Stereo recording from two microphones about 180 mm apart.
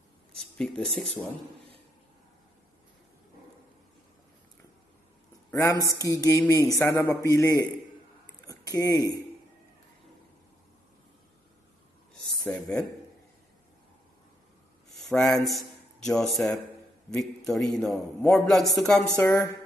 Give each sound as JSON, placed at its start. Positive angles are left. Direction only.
{"t": 0.3, "sound": "speech", "side_deg": 5}
{"t": 5.5, "sound": "a man's voice", "side_deg": 15}
{"t": 5.9, "sound": "mantra", "side_deg": 20}
{"t": 6.8, "sound": "a man's voice", "side_deg": 15}
{"t": 12.3, "sound": "speech", "side_deg": 5}
{"t": 14.9, "sound": "a woman's voice", "side_deg": 5}
{"t": 19.2, "sound": "a man's voice", "side_deg": 15}